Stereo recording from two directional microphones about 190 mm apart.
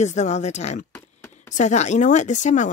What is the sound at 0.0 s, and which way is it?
Speech, 40° left (ahead or behind).